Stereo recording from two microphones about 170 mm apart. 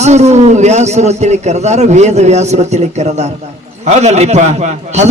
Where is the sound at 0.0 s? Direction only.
40° right (ahead or behind).